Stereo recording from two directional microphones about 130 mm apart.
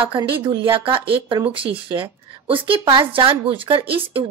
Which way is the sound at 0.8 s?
45° right (ahead or behind).